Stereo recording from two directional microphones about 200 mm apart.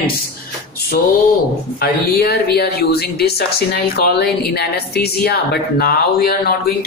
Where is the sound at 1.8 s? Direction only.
50° left (ahead or behind).